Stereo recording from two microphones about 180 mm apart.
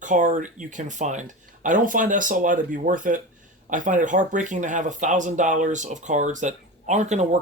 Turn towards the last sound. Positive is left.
turn(degrees=-40)  # may be behind; listen again after turning